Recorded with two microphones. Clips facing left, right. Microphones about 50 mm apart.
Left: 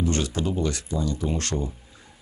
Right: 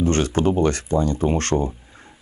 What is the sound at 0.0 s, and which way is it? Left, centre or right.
Speech, right.